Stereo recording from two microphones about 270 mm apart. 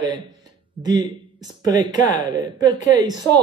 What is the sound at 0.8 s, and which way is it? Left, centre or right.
A man's voice, centre.